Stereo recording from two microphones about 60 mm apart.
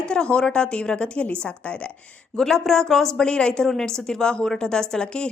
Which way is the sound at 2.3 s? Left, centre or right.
Centre.